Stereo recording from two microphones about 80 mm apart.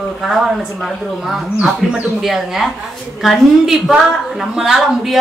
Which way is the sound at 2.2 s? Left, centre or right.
Centre.